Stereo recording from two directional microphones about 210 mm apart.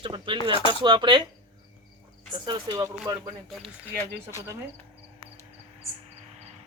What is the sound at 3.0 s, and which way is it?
Speech, centre (ahead or behind).